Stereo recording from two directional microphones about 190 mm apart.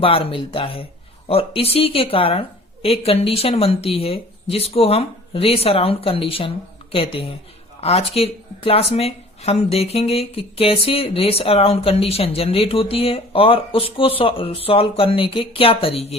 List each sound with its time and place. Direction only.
0.0 s speech: 30° left (ahead or behind)